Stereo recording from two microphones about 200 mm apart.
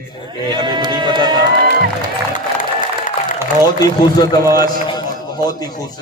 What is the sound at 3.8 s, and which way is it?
A man's voice, 20° left (ahead or behind).